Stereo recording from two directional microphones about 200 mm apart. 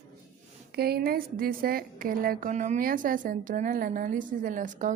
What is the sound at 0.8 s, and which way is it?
A woman's voice, 50° right (ahead or behind).